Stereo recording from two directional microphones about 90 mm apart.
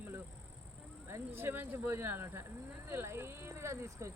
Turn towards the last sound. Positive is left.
turn(degrees=-30)  # may be behind; listen again after turning